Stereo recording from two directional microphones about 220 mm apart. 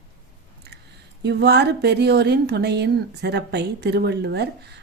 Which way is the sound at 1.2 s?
50° right (ahead or behind).